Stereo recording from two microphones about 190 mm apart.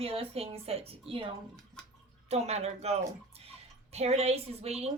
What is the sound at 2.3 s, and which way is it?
A woman's voice, 35° right (ahead or behind).